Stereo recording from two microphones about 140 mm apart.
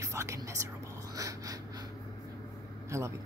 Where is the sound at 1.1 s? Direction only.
25° right (ahead or behind).